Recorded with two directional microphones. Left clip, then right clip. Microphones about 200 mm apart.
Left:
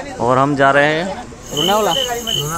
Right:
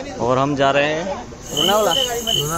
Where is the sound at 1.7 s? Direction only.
30° left (ahead or behind).